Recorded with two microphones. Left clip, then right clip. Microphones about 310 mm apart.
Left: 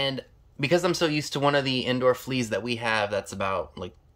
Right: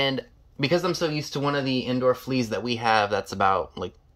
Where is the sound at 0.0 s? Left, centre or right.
Centre.